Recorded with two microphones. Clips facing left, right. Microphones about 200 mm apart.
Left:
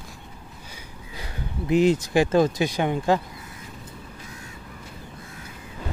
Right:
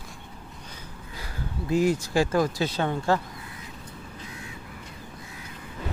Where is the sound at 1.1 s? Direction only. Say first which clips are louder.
Left 2 dB; 20° left (ahead or behind).